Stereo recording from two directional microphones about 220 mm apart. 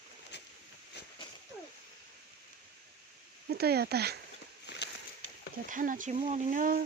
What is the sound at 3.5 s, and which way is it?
Speech, 45° right (ahead or behind).